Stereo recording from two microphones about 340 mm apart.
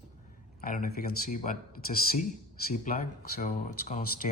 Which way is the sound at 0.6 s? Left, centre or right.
Left.